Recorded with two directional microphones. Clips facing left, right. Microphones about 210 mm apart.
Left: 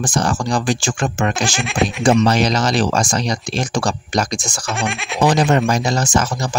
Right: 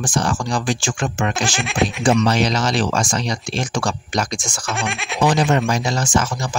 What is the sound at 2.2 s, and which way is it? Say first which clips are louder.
Speech: left 2 dB; 40° left (ahead or behind).